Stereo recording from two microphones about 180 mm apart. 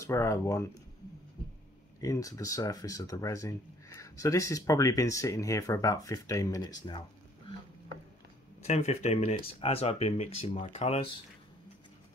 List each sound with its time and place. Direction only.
0.0 s speech: 15° left (ahead or behind)
2.0 s speech: 20° left (ahead or behind)
8.6 s speech: 35° left (ahead or behind)